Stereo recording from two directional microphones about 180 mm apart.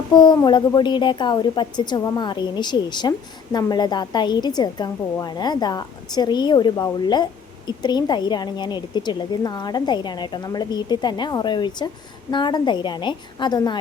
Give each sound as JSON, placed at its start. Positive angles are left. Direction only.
{"t": 0.1, "sound": "a woman's voice", "side_deg": 25}